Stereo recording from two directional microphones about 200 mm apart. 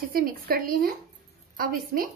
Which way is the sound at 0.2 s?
45° right (ahead or behind).